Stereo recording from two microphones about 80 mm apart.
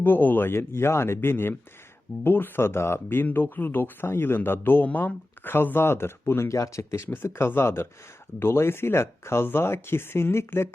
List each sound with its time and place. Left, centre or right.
0.0 s speech: left